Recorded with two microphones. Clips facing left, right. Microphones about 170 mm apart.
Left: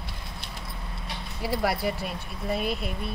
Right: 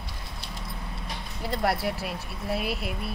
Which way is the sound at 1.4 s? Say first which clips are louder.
Even; 5° left (ahead or behind).